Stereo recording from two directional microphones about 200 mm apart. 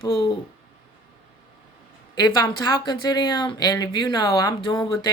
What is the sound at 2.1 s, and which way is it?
Speech, 20° left (ahead or behind).